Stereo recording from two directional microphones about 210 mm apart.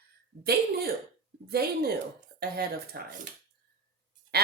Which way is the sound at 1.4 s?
50° right (ahead or behind).